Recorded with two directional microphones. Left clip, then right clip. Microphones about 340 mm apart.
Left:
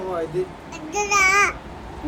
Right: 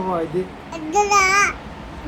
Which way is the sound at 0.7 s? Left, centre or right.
Centre.